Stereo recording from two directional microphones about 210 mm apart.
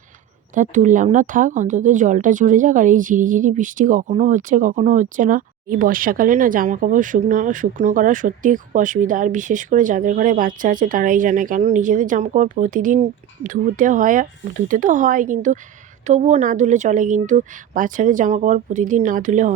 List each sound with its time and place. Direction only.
0.5 s speech: 35° right (ahead or behind)